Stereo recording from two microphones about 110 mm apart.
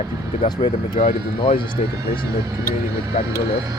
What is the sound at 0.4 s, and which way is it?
Speech, 40° left (ahead or behind).